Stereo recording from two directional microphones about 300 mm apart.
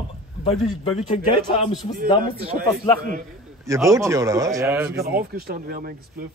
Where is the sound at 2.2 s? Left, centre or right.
Right.